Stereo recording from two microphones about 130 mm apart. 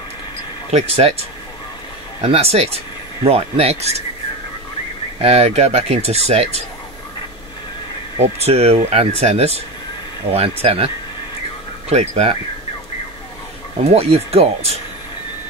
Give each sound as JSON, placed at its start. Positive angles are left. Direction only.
{"t": 0.7, "sound": "speech", "side_deg": -50}
{"t": 2.2, "sound": "speech", "side_deg": -50}
{"t": 5.2, "sound": "speech", "side_deg": -55}
{"t": 8.2, "sound": "speech", "side_deg": -55}
{"t": 11.9, "sound": "speech", "side_deg": -55}
{"t": 13.7, "sound": "speech", "side_deg": -55}